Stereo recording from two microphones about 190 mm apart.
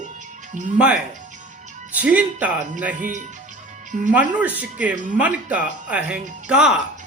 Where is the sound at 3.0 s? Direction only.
40° right (ahead or behind).